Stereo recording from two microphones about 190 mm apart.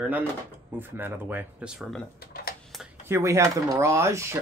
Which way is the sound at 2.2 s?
50° left (ahead or behind).